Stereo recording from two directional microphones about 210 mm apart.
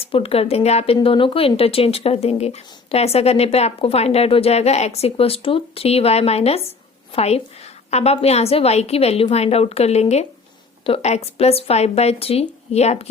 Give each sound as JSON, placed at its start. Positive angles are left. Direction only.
{"t": 0.0, "sound": "a woman's voice", "side_deg": 25}